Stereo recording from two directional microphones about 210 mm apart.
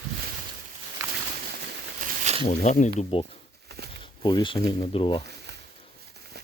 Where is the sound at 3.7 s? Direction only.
50° right (ahead or behind).